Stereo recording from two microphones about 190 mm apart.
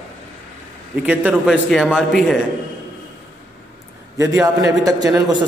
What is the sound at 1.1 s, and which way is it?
Speech, 5° right (ahead or behind).